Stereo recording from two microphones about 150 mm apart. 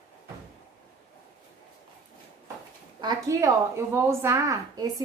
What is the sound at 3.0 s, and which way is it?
A woman's voice, 25° right (ahead or behind).